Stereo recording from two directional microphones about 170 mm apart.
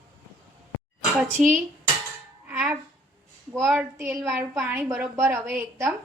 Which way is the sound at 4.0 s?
15° right (ahead or behind).